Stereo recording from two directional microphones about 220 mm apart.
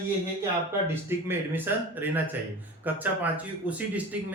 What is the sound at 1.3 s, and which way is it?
Speech, 10° right (ahead or behind).